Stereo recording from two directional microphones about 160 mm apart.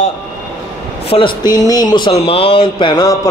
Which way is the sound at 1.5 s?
25° left (ahead or behind).